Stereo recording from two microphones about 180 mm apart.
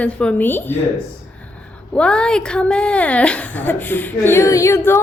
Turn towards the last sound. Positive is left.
turn(degrees=15)  # may be behind; listen again after turning